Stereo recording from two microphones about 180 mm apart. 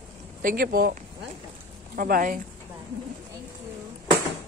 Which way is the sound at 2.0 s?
50° right (ahead or behind).